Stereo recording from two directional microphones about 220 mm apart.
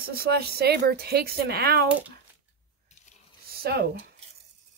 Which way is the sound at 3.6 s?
45° right (ahead or behind).